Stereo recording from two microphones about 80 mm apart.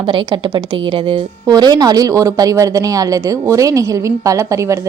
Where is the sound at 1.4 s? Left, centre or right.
Right.